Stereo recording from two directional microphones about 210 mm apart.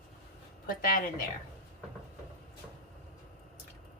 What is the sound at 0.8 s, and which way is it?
Speech, 40° left (ahead or behind).